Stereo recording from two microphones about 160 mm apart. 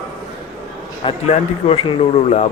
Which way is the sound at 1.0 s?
35° left (ahead or behind).